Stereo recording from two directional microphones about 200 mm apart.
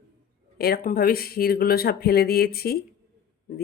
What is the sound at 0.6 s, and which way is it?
Speech, 50° left (ahead or behind).